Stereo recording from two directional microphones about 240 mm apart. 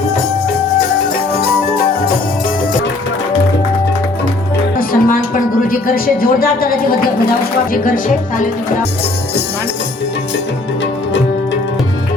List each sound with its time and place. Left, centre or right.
4.8 s music: left
5.6 s speech: left